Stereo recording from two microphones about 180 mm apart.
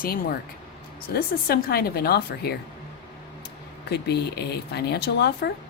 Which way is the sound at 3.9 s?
65° left (ahead or behind).